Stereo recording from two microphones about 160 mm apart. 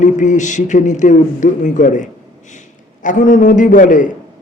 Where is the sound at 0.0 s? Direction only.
50° left (ahead or behind).